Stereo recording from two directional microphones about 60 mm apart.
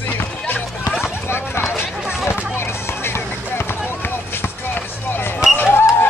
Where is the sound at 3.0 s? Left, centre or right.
Left.